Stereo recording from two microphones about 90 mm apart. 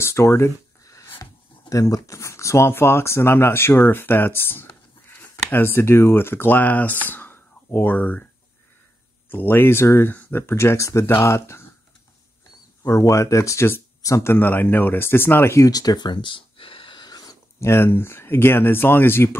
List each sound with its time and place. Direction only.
0.0 s speech: 30° left (ahead or behind)
9.3 s speech: 25° left (ahead or behind)
12.8 s speech: 35° left (ahead or behind)
17.6 s speech: 25° left (ahead or behind)